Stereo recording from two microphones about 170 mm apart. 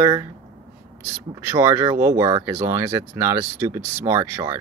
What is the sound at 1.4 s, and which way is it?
Speech, 15° right (ahead or behind).